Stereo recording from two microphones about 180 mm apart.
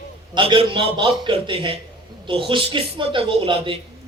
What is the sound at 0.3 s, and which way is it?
A man's voice, 30° right (ahead or behind).